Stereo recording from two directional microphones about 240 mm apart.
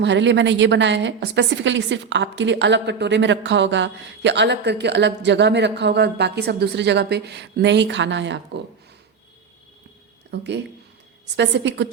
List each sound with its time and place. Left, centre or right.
0.0 s a woman's voice: right
10.3 s a woman's voice: right